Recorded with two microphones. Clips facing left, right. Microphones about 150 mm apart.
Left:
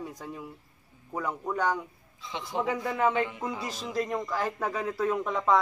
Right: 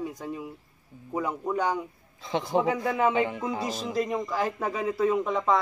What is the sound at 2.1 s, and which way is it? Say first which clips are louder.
Speech: right 7 dB; 45° right (ahead or behind).